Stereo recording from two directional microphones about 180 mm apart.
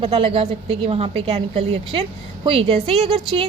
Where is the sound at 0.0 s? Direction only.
30° right (ahead or behind).